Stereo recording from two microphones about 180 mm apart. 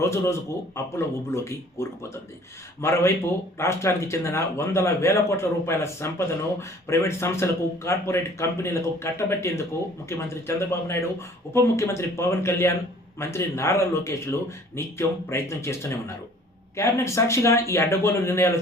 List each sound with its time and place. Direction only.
0.0 s speech: 15° left (ahead or behind)